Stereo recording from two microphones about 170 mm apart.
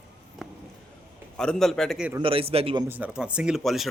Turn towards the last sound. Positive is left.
turn(degrees=0)  # may be behind; listen again after turning